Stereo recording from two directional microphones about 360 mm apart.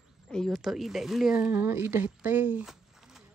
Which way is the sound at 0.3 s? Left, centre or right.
Centre.